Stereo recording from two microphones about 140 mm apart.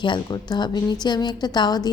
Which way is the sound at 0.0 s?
35° left (ahead or behind).